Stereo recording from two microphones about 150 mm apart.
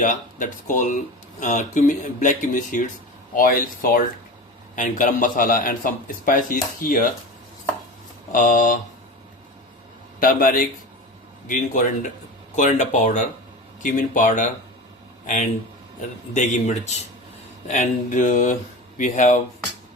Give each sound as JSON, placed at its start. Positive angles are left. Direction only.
{"t": 0.0, "sound": "a man's voice", "side_deg": 60}
{"t": 3.3, "sound": "speech", "side_deg": 70}
{"t": 4.7, "sound": "a man's voice", "side_deg": 55}
{"t": 8.3, "sound": "a man's voice", "side_deg": 65}
{"t": 10.2, "sound": "a man's voice", "side_deg": 70}
{"t": 16.0, "sound": "a man's voice", "side_deg": 55}